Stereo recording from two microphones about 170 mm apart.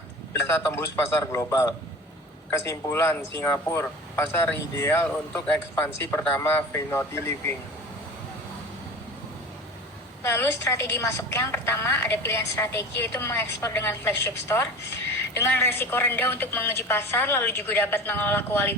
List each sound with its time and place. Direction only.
0.3 s speech: 15° left (ahead or behind)
10.2 s speech: 15° left (ahead or behind)